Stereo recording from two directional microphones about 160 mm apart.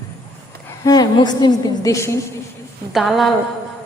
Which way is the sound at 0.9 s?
25° left (ahead or behind).